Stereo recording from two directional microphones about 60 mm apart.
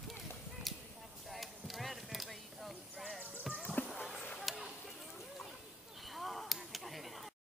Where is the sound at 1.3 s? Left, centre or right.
Centre.